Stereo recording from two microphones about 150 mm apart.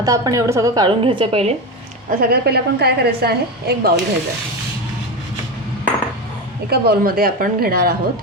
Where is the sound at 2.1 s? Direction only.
85° right.